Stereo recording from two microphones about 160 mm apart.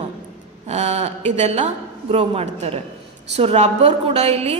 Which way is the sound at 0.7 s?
45° right (ahead or behind).